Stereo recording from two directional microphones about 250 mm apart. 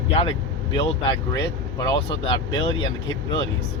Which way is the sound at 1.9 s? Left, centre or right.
Centre.